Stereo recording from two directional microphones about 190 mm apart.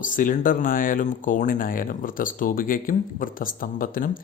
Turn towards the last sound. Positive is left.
turn(degrees=45)  # may be behind; listen again after turning